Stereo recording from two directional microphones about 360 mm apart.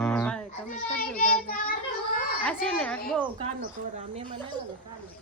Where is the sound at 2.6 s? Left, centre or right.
Centre.